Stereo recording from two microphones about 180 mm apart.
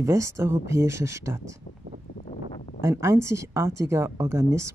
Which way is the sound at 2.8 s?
15° right (ahead or behind).